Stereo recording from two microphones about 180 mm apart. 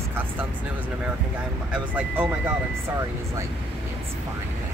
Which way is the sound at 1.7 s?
10° right (ahead or behind).